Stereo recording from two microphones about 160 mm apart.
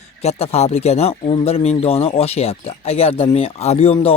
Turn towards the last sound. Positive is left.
turn(degrees=40)  # may be behind; listen again after turning